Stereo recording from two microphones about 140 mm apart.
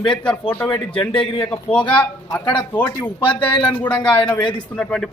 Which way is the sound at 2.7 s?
10° left (ahead or behind).